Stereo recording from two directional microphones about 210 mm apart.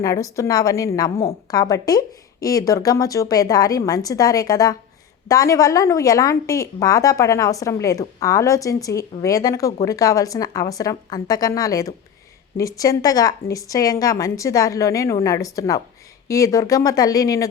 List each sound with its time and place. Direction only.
0.0 s a woman's voice: 15° left (ahead or behind)